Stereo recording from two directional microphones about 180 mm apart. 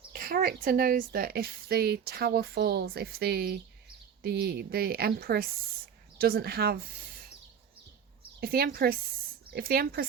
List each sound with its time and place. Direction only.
0.1 s a woman's voice: 55° right (ahead or behind)
8.4 s a woman's voice: 55° right (ahead or behind)